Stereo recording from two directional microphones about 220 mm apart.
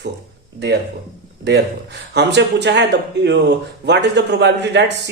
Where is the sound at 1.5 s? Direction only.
50° right (ahead or behind).